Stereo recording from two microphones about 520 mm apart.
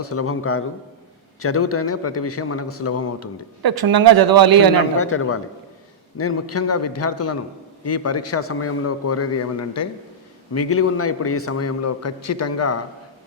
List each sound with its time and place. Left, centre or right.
0.0 s a man's voice: left
3.6 s a man's voice: right
4.9 s a man's voice: left